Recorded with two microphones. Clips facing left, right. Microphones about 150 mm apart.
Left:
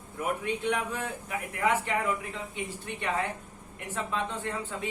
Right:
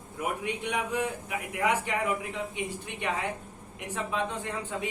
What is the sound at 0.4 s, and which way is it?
A man's voice, 15° right (ahead or behind).